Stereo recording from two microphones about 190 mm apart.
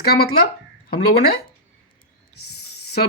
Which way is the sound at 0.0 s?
55° left (ahead or behind).